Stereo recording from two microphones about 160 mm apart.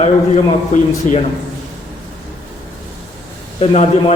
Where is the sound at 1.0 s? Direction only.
50° left (ahead or behind).